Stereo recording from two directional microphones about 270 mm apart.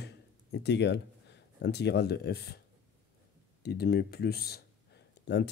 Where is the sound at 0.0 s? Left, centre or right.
Left.